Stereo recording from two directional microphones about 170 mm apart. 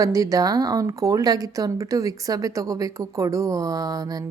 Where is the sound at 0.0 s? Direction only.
20° right (ahead or behind).